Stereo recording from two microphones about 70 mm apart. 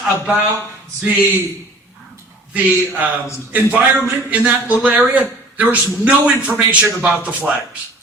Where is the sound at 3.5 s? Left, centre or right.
Centre.